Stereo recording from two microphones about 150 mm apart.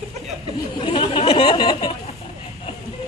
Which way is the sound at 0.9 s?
35° left (ahead or behind).